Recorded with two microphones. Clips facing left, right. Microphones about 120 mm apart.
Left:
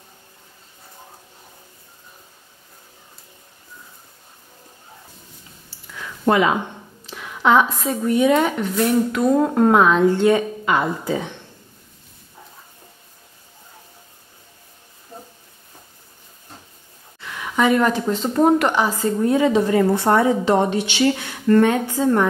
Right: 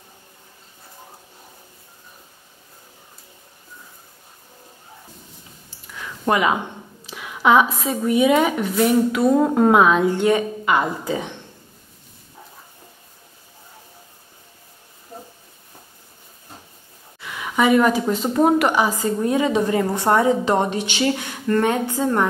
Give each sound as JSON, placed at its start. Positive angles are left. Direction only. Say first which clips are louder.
{"t": 6.3, "sound": "a woman's voice", "louder": "even", "side_deg": -15}
{"t": 17.6, "sound": "a woman's voice", "louder": "right 1 dB", "side_deg": -10}